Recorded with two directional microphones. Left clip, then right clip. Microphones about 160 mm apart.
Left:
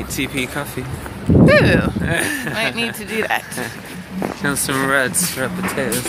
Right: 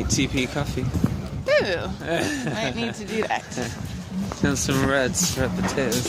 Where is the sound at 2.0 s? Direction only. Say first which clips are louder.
Left 5 dB; 55° right (ahead or behind).